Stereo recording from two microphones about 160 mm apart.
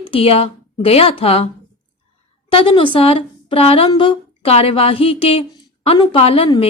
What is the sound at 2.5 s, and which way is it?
A woman's voice, 35° left (ahead or behind).